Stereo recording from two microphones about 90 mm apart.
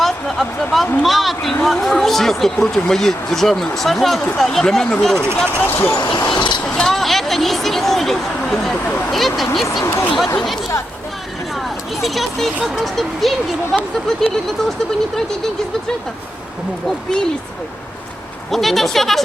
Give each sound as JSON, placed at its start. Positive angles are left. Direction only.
{"t": 0.0, "sound": "a sound", "side_deg": 0}
{"t": 1.0, "sound": "speech", "side_deg": 0}
{"t": 5.6, "sound": "speech", "side_deg": 25}
{"t": 6.0, "sound": "speech", "side_deg": 55}
{"t": 6.6, "sound": "speech", "side_deg": 5}
{"t": 9.8, "sound": "speech", "side_deg": 35}
{"t": 10.3, "sound": "speech", "side_deg": 0}
{"t": 12.0, "sound": "speech", "side_deg": 0}
{"t": 18.5, "sound": "speech", "side_deg": 0}